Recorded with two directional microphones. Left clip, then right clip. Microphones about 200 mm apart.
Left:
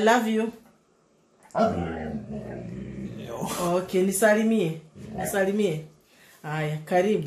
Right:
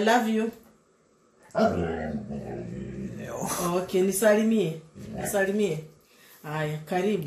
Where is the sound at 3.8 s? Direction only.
35° left (ahead or behind).